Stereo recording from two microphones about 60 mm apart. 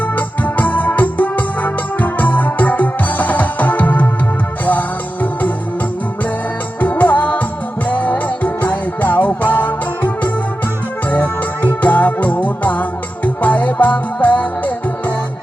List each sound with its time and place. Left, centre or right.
0.2 s organ: left
4.6 s music: left
6.7 s music: left
11.1 s music: left